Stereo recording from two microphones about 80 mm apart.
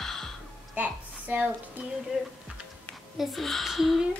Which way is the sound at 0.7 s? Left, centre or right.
Centre.